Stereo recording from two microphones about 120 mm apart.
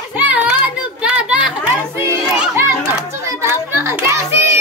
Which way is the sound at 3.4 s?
20° right (ahead or behind).